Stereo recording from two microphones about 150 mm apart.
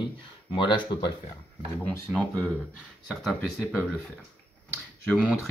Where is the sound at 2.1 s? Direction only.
5° left (ahead or behind).